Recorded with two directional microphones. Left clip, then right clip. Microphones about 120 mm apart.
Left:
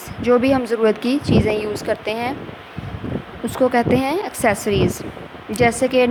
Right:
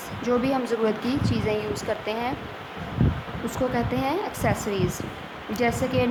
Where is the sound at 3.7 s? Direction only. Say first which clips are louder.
Left 8 dB; 60° left (ahead or behind).